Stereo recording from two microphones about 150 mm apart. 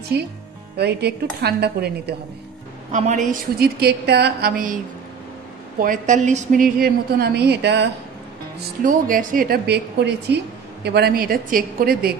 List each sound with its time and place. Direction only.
0.1 s speech: 90° right
2.9 s speech: 50° right (ahead or behind); by 4.7 s 80° right
5.8 s a woman's voice: 60° right (ahead or behind); by 7.7 s 90° right
8.5 s speech: 70° right (ahead or behind); by 12.2 s 90° right